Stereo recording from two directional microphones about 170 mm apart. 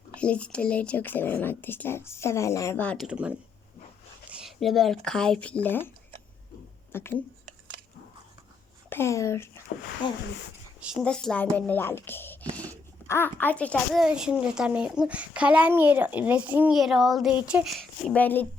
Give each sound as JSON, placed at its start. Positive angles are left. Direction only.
{"t": 0.2, "sound": "speech", "side_deg": 5}
{"t": 3.1, "sound": "speech", "side_deg": -5}
{"t": 6.9, "sound": "speech", "side_deg": 15}
{"t": 8.9, "sound": "speech", "side_deg": 15}
{"t": 10.0, "sound": "speech", "side_deg": 25}
{"t": 11.0, "sound": "a child's voice", "side_deg": 5}
{"t": 14.0, "sound": "speech", "side_deg": -5}